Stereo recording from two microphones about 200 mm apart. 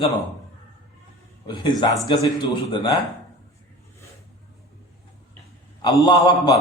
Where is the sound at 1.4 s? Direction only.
20° left (ahead or behind).